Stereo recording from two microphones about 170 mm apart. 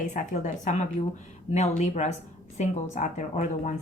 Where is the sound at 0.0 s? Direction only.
50° left (ahead or behind).